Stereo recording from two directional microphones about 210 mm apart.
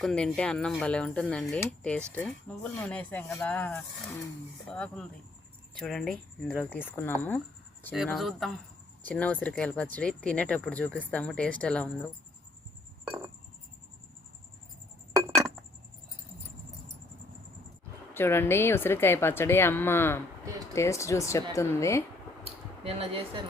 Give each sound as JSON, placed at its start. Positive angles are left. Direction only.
{"t": 0.0, "sound": "a woman's voice", "side_deg": 5}
{"t": 6.7, "sound": "a woman's voice", "side_deg": 10}
{"t": 18.1, "sound": "a woman's voice", "side_deg": 10}
{"t": 22.4, "sound": "a sound", "side_deg": -30}